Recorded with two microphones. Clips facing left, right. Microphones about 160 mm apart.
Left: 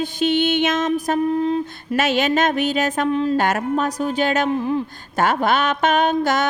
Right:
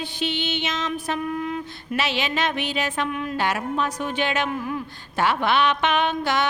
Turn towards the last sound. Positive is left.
turn(degrees=45)  # may be behind; listen again after turning